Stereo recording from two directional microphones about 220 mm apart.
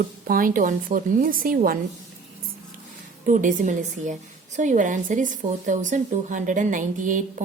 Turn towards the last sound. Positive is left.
turn(degrees=-35)  # may be behind; listen again after turning